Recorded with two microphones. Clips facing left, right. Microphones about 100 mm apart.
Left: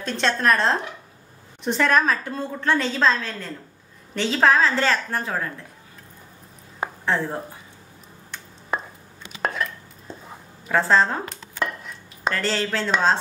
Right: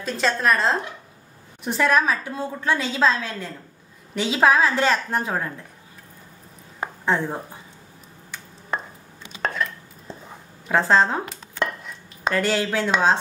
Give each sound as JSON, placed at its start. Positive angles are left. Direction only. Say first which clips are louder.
{"t": 0.0, "sound": "a woman's voice", "louder": "even", "side_deg": -5}
{"t": 7.1, "sound": "a woman's voice", "louder": "right 2 dB", "side_deg": -10}
{"t": 8.7, "sound": "chopping", "louder": "left 1 dB", "side_deg": 5}
{"t": 9.4, "sound": "dishes", "louder": "even", "side_deg": 0}
{"t": 10.7, "sound": "a woman's voice", "louder": "right 1 dB", "side_deg": -15}
{"t": 11.6, "sound": "dishes", "louder": "right 1 dB", "side_deg": 0}
{"t": 12.4, "sound": "a woman's voice", "louder": "right 4 dB", "side_deg": -15}